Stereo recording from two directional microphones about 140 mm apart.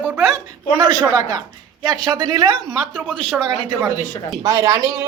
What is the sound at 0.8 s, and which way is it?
A man's voice, 30° right (ahead or behind).